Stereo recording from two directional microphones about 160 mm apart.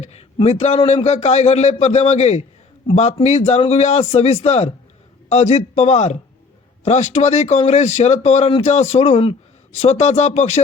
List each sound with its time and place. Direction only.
0.0 s a man's voice: 40° left (ahead or behind)